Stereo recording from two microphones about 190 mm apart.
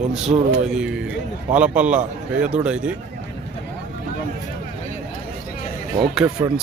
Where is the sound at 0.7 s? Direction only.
5° right (ahead or behind).